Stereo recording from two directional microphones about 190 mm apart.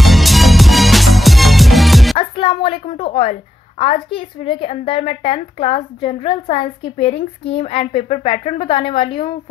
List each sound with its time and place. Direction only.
0.0 s music: centre (ahead or behind)
2.1 s music: 30° left (ahead or behind)
3.0 s a woman's voice: 30° left (ahead or behind)